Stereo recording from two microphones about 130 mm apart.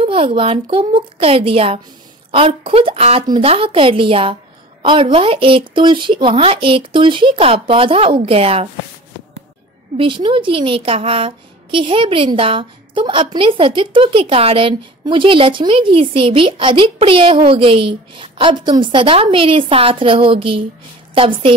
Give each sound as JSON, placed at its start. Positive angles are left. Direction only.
{"t": 0.0, "sound": "speech", "side_deg": -45}
{"t": 9.9, "sound": "a woman's voice", "side_deg": -40}